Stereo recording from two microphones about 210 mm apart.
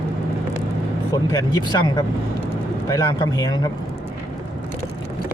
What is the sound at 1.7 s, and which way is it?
Speech, 20° left (ahead or behind).